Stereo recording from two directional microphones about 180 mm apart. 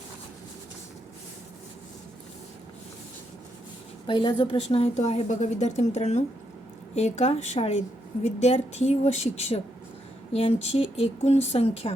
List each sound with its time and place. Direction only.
4.0 s speech: 25° left (ahead or behind)